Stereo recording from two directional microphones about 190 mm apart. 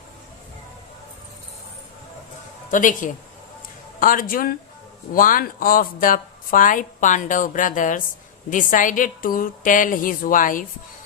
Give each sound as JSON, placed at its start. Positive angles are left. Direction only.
{"t": 2.6, "sound": "speech", "side_deg": 45}